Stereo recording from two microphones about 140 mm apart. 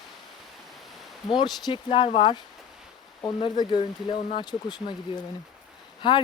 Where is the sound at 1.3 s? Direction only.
35° left (ahead or behind).